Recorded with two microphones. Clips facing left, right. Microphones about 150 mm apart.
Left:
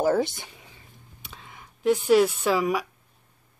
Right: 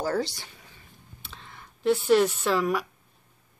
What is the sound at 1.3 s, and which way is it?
Speech, 10° left (ahead or behind).